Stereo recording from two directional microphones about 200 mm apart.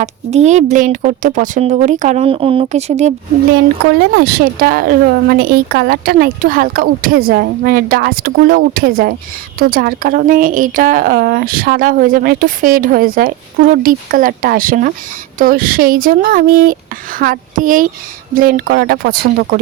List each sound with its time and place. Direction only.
0.0 s speech: 35° right (ahead or behind)
4.1 s a woman's voice: 50° right (ahead or behind)